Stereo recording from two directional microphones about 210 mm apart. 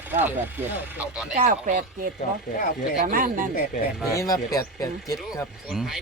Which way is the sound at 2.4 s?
40° left (ahead or behind).